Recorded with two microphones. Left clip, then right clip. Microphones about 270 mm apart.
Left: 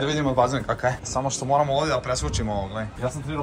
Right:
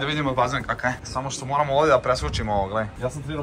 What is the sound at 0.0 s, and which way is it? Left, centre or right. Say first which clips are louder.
Speech: left 1 dB; centre.